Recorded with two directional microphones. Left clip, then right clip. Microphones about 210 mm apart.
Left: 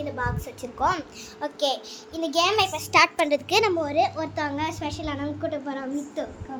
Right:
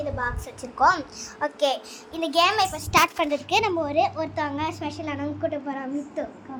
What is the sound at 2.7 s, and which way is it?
A child's voice, 25° left (ahead or behind).